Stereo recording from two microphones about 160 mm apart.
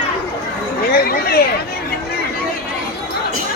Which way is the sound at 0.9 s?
70° left (ahead or behind).